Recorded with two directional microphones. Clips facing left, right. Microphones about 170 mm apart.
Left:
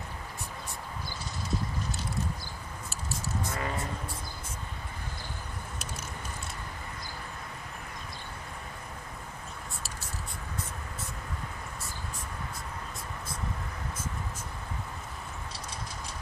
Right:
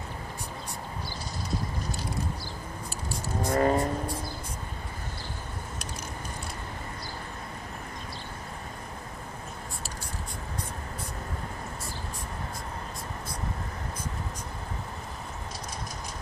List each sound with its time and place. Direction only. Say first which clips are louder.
3.4 s vehicle: right 14 dB; 40° right (ahead or behind)